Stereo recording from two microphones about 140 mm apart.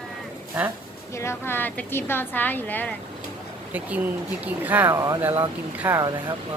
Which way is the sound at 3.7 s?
10° right (ahead or behind).